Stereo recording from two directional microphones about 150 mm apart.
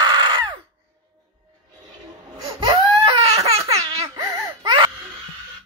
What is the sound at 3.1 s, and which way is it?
Baby laughter, 45° right (ahead or behind).